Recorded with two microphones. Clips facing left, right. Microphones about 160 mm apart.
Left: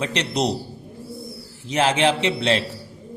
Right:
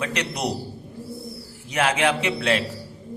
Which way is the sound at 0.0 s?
25° left (ahead or behind).